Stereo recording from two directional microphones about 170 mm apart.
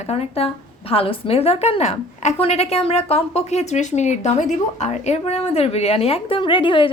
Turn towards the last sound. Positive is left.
turn(degrees=30)  # may be behind; listen again after turning